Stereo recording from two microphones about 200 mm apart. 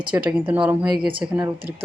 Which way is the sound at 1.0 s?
25° right (ahead or behind).